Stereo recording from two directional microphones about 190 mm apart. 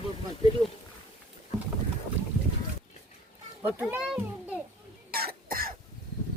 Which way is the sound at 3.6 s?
10° right (ahead or behind).